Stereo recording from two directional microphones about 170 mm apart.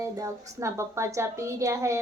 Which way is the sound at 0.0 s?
15° right (ahead or behind).